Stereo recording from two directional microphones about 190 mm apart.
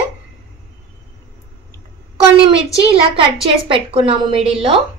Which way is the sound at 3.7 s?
30° right (ahead or behind).